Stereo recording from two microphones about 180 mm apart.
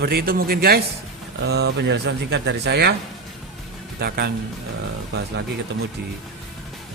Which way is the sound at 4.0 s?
60° right (ahead or behind).